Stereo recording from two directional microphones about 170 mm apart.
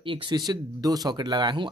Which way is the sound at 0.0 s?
30° right (ahead or behind).